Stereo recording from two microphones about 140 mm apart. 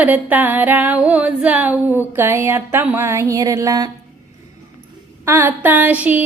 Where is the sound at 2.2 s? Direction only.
20° right (ahead or behind).